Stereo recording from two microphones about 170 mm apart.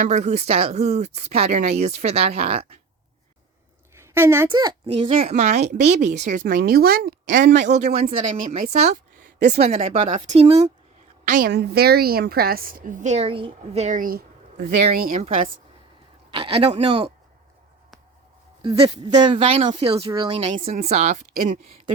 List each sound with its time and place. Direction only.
0.0 s speech: 40° right (ahead or behind)
4.1 s a woman's voice: 15° right (ahead or behind)
4.9 s a woman's voice: 35° right (ahead or behind); by 7.4 s 60° right (ahead or behind)
7.7 s a woman's voice: 40° right (ahead or behind)
8.8 s a sound: 60° right (ahead or behind)
9.6 s speech: 40° right (ahead or behind)
11.3 s a woman's voice: 55° right (ahead or behind)
11.5 s a woman's voice: 70° right (ahead or behind)
14.8 s a woman's voice: 40° right (ahead or behind)
18.6 s speech: 30° right (ahead or behind)